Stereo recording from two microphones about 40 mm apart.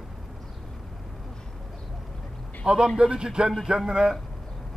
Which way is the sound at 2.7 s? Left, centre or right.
Right.